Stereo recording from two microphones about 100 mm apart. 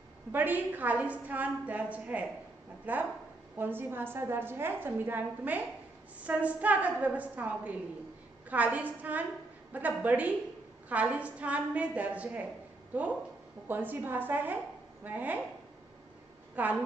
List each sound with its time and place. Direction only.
0.3 s a woman's voice: 20° right (ahead or behind)
16.6 s a woman's voice: 15° right (ahead or behind)